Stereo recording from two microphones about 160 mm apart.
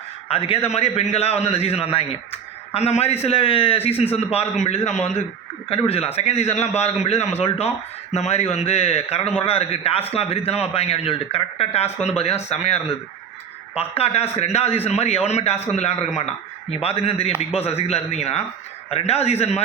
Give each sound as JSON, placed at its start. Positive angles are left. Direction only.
{"t": 0.3, "sound": "a man's voice", "side_deg": 35}